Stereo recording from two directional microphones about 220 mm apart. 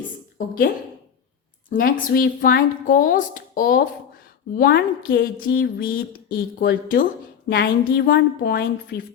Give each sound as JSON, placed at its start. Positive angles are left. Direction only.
{"t": 0.3, "sound": "a woman's voice", "side_deg": 40}
{"t": 1.7, "sound": "speech", "side_deg": 40}